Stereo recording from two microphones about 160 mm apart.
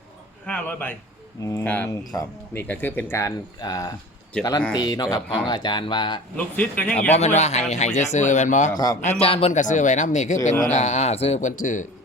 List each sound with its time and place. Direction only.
0.4 s a man's voice: 10° left (ahead or behind)
4.4 s speech: 5° left (ahead or behind)
4.7 s speech: 25° left (ahead or behind)
6.3 s a man's voice: 10° left (ahead or behind)
7.2 s speech: 45° left (ahead or behind)
8.7 s speech: 25° left (ahead or behind)
9.0 s speech: 45° left (ahead or behind)
9.5 s speech: 50° left (ahead or behind)